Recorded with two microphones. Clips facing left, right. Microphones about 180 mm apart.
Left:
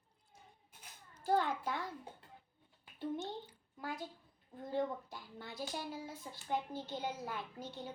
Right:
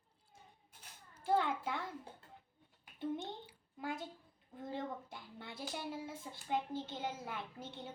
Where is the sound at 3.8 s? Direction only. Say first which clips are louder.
Right 1 dB; 25° right (ahead or behind).